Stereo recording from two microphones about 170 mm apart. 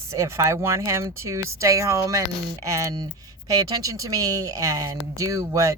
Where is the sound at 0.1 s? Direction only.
15° right (ahead or behind).